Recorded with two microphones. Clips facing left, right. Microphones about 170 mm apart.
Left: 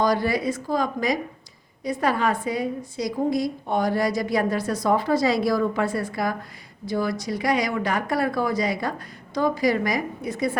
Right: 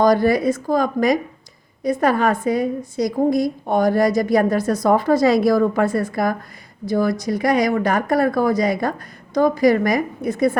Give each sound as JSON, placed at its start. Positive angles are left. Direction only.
{"t": 0.0, "sound": "a woman's voice", "side_deg": -50}